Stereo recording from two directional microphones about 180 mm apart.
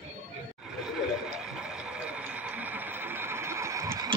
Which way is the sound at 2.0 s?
10° right (ahead or behind).